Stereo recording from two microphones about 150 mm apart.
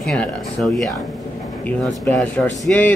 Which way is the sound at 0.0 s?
5° left (ahead or behind).